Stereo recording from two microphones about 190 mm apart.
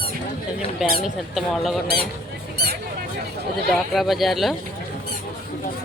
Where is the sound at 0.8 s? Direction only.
Centre (ahead or behind).